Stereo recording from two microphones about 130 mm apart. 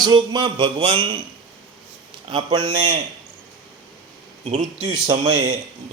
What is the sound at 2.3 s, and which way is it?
Speech, 35° right (ahead or behind).